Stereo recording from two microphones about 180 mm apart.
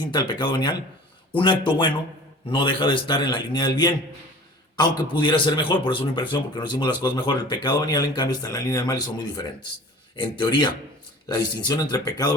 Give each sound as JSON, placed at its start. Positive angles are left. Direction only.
{"t": 0.0, "sound": "speech", "side_deg": 25}
{"t": 5.2, "sound": "speech", "side_deg": 25}